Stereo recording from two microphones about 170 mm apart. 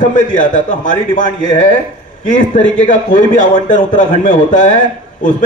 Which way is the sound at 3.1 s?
50° left (ahead or behind).